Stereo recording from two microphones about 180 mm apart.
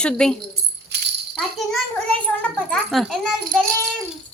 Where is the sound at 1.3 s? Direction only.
5° left (ahead or behind).